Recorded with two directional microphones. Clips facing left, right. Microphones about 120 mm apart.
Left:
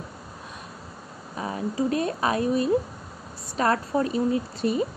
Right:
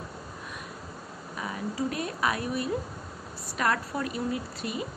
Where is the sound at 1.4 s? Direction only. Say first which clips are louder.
Left 5 dB; 30° left (ahead or behind).